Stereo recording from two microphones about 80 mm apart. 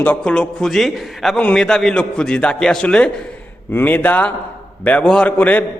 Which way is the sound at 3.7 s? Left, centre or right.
Left.